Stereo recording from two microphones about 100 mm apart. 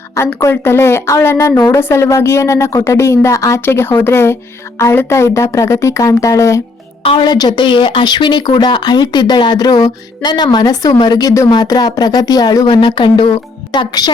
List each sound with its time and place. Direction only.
0.3 s speech: 25° left (ahead or behind)
3.6 s speech: 20° left (ahead or behind)
7.0 s a woman's voice: 70° left (ahead or behind)
7.3 s speech: 45° left (ahead or behind)
13.7 s speech: 45° left (ahead or behind)